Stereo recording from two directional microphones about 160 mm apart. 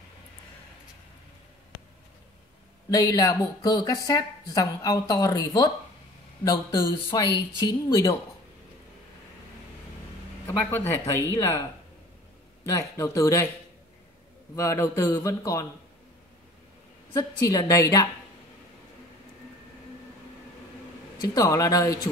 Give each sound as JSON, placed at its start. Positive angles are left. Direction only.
{"t": 2.9, "sound": "a woman's voice", "side_deg": 20}
{"t": 10.4, "sound": "speech", "side_deg": 15}
{"t": 12.6, "sound": "speech", "side_deg": 20}
{"t": 14.5, "sound": "a woman's voice", "side_deg": 20}
{"t": 17.1, "sound": "a woman's voice", "side_deg": 20}
{"t": 21.2, "sound": "a woman's voice", "side_deg": 20}